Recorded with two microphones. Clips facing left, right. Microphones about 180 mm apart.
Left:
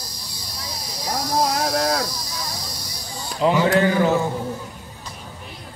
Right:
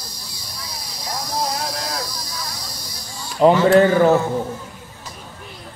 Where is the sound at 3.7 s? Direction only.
40° right (ahead or behind).